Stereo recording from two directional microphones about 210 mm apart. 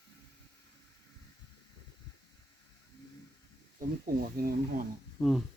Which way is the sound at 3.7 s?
45° right (ahead or behind).